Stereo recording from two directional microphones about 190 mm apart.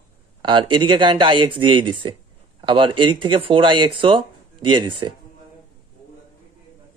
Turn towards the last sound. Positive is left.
turn(degrees=-25)  # may be behind; listen again after turning